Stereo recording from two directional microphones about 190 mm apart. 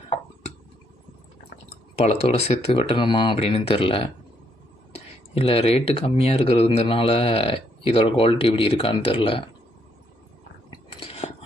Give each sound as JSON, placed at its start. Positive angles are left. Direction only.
{"t": 2.0, "sound": "speech", "side_deg": 35}
{"t": 10.7, "sound": "chewing", "side_deg": 30}